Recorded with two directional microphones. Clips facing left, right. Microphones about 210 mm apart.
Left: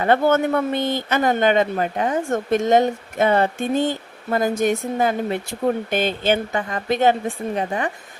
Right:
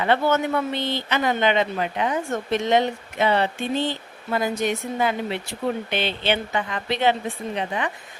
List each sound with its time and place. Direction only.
0.0 s speech: 50° left (ahead or behind)